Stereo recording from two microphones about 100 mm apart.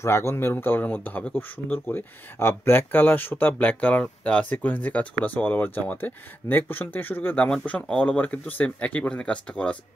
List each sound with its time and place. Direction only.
0.0 s speech: 25° left (ahead or behind); by 9.8 s 10° left (ahead or behind)